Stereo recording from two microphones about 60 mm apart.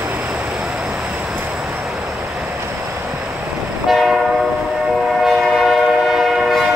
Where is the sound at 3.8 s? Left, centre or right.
Centre.